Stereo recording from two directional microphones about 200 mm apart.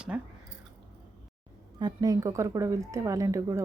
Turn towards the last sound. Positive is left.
turn(degrees=-15)  # may be behind; listen again after turning